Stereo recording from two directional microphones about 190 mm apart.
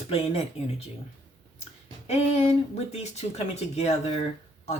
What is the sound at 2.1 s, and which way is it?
Speech, 35° left (ahead or behind).